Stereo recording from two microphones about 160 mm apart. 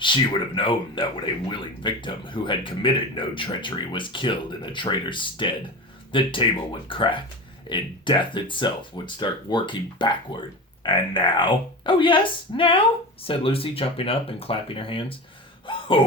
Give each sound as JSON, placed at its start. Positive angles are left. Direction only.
{"t": 0.0, "sound": "speech", "side_deg": 30}
{"t": 15.6, "sound": "gasp", "side_deg": 35}